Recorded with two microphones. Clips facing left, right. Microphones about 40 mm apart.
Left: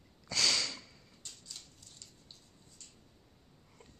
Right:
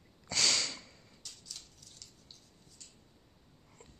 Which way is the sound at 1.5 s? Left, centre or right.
Left.